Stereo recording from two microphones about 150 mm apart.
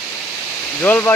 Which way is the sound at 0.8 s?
10° left (ahead or behind).